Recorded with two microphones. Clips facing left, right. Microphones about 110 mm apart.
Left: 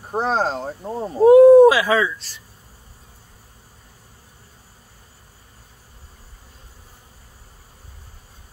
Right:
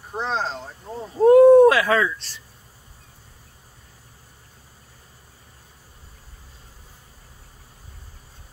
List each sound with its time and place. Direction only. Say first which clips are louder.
0.1 s speech: left 6 dB; 45° left (ahead or behind)
1.2 s speech: left 2 dB; 5° left (ahead or behind)